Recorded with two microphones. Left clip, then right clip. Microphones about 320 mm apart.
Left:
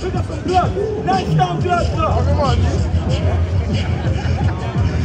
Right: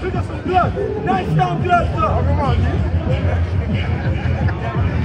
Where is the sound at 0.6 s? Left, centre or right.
Centre.